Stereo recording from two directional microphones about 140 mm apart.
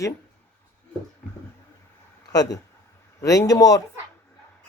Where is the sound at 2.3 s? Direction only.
25° left (ahead or behind).